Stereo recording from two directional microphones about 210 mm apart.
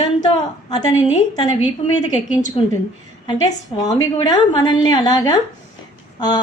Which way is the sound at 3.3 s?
20° left (ahead or behind).